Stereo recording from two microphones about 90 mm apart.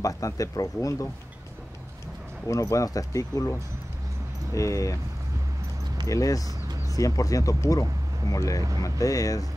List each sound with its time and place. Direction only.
0.0 s speech: 40° left (ahead or behind)
2.4 s speech: 35° left (ahead or behind)
6.0 s speech: 40° left (ahead or behind)